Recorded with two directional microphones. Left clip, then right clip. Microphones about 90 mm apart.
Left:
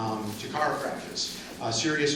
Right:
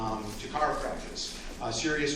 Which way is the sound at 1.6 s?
65° right (ahead or behind).